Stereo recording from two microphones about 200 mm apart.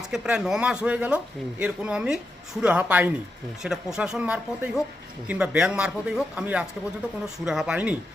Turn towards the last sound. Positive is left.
turn(degrees=-5)  # may be behind; listen again after turning